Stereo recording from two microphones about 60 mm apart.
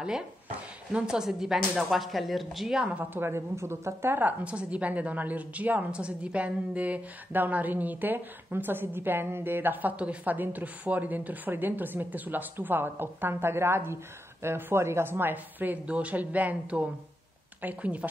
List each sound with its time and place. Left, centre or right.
0.9 s speech: centre
3.2 s speech: right
4.2 s a woman's voice: right